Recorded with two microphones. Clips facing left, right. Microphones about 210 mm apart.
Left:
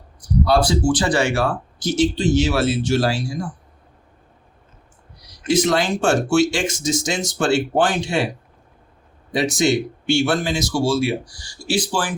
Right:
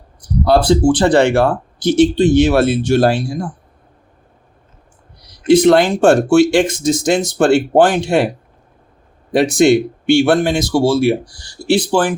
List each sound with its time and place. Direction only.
0.2 s speech: 60° right (ahead or behind)
5.5 s speech: 60° right (ahead or behind)
9.3 s speech: 55° right (ahead or behind)